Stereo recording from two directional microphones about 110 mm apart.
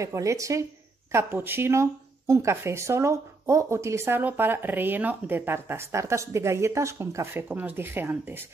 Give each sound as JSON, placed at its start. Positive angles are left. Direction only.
{"t": 0.0, "sound": "speech", "side_deg": -30}